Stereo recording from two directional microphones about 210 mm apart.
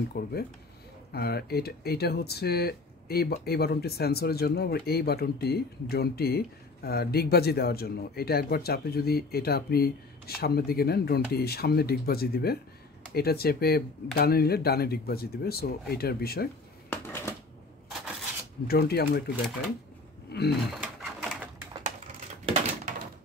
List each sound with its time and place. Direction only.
0.1 s speech: 50° left (ahead or behind)
16.9 s shuffling cards: 10° left (ahead or behind)
18.7 s speech: 50° left (ahead or behind)
20.2 s a sound: 50° left (ahead or behind)
20.7 s pigeon: centre (ahead or behind)
21.8 s a sound: 35° right (ahead or behind)